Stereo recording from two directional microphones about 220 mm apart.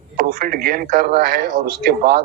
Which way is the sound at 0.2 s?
40° right (ahead or behind).